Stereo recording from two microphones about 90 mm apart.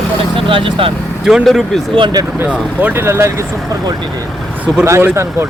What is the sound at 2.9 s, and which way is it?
Speech, 25° right (ahead or behind).